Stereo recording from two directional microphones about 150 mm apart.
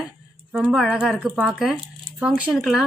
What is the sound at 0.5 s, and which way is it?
A woman's voice, centre (ahead or behind).